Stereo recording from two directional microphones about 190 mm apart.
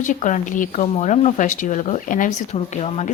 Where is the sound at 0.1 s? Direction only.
40° left (ahead or behind).